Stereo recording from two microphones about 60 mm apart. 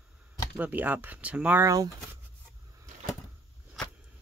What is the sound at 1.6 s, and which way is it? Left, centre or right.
Speech, right.